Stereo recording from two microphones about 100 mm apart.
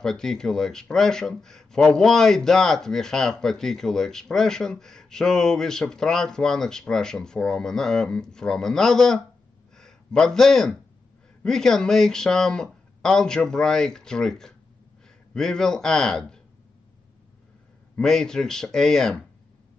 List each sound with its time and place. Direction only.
0.0 s speech: 5° left (ahead or behind)
17.9 s speech: 5° left (ahead or behind)